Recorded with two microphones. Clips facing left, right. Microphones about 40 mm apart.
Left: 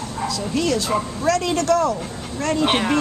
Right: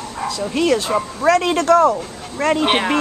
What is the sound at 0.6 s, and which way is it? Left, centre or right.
Speech, right.